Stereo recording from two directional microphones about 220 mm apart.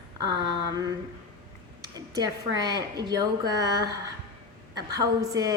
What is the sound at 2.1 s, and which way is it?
A woman's voice, 20° right (ahead or behind).